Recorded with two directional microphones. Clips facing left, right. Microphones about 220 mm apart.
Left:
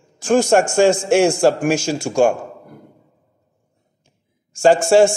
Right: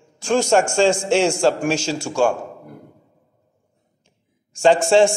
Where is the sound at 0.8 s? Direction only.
10° left (ahead or behind).